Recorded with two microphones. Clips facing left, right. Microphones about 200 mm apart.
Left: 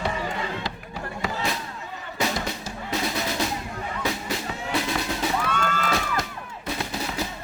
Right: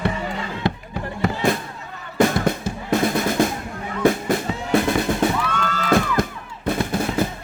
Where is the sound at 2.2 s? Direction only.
50° right (ahead or behind).